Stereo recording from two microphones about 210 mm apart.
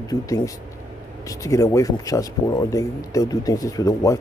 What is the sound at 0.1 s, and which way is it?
Speech, 20° left (ahead or behind).